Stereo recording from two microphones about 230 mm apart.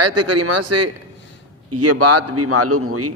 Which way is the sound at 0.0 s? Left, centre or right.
Right.